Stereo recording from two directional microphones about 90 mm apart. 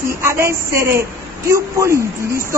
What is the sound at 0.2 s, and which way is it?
A woman's voice, 30° right (ahead or behind).